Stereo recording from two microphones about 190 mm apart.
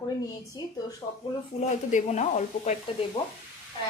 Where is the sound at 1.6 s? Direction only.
35° left (ahead or behind).